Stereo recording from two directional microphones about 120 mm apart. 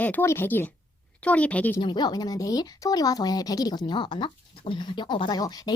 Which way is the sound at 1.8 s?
40° left (ahead or behind).